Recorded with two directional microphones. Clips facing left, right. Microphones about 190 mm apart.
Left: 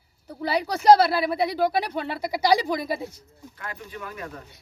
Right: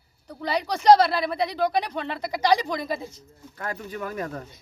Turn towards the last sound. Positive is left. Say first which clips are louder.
# right 6 dB
turn(degrees=-40)  # may be behind; listen again after turning